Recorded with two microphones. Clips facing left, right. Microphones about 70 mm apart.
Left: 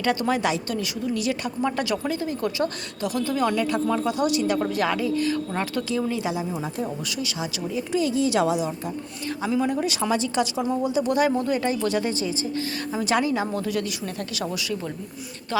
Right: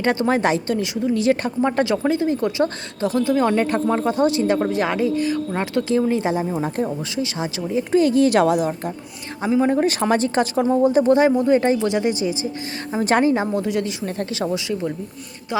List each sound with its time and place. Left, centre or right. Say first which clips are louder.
0.0 s a woman's voice: right 4 dB; right
3.5 s a woman's voice: right 4 dB; right
6.1 s speech: right 6 dB; right
7.9 s speech: right 7 dB; right
9.4 s speech: right 6 dB; right
11.1 s a woman's voice: right 7 dB; right
12.9 s a woman's voice: right 6 dB; right